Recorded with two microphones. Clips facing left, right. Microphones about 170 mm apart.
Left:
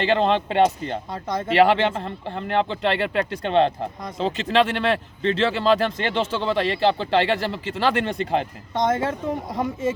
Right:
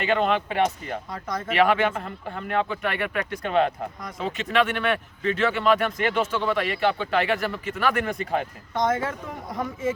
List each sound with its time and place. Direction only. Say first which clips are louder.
0.0 s speech: left 3 dB; 30° left (ahead or behind)